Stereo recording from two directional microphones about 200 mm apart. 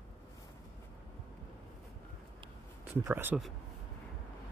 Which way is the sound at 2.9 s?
10° right (ahead or behind).